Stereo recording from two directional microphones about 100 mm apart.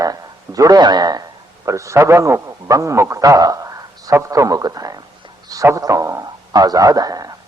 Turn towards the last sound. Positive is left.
turn(degrees=-40)  # may be behind; listen again after turning